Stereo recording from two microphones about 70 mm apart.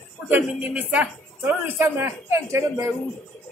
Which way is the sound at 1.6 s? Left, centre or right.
Right.